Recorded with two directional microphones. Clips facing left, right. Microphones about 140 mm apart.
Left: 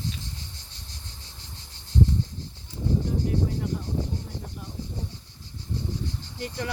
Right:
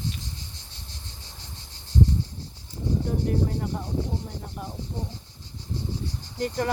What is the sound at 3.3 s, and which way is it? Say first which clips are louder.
Speech: right 1 dB; 50° right (ahead or behind).